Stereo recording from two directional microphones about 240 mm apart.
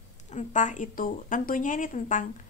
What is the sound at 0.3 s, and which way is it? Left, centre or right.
Speech, left.